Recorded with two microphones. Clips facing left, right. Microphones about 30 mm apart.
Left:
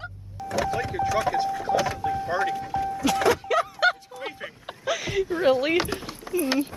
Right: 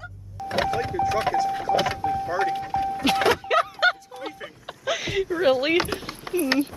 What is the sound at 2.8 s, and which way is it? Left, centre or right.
Music, right.